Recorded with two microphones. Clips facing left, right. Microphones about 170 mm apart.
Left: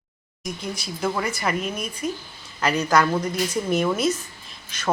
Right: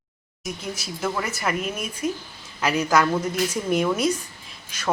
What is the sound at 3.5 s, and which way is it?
Speech, 10° right (ahead or behind).